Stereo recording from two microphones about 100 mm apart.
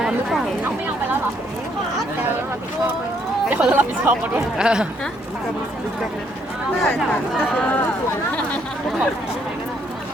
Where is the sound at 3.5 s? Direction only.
20° right (ahead or behind).